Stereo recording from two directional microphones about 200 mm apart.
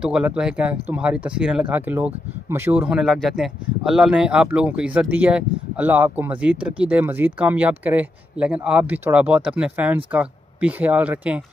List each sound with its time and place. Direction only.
0.0 s speech: 5° right (ahead or behind)